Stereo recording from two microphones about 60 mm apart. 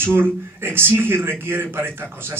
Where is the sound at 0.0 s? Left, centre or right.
Right.